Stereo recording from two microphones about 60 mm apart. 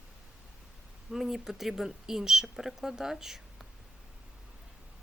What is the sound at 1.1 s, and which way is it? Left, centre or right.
Speech, centre.